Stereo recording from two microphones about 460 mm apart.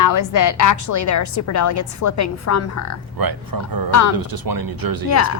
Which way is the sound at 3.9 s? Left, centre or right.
Left.